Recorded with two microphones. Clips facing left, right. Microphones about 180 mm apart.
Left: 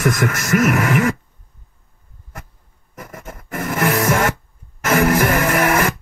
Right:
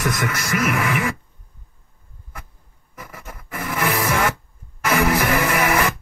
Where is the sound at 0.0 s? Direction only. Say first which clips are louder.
Left 5 dB; 45° left (ahead or behind).